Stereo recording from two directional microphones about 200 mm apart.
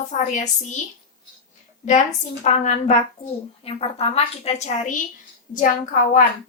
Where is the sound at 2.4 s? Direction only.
35° left (ahead or behind).